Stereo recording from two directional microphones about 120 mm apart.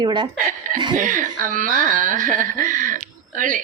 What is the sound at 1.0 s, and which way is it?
Speech, 90° right.